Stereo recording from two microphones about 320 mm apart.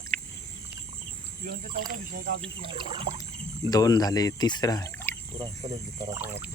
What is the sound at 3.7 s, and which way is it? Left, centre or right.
Speech, centre.